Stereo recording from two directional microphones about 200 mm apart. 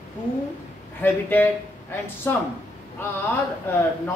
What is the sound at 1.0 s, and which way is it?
Speech, 10° left (ahead or behind).